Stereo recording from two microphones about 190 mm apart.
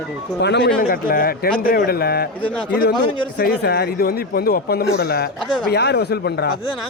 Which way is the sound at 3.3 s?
55° left (ahead or behind).